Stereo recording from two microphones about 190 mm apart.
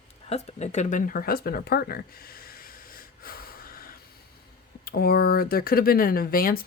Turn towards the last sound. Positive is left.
turn(degrees=50)  # may be behind; listen again after turning